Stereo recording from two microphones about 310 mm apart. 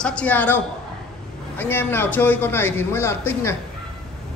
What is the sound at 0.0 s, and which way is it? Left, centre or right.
Speech, centre.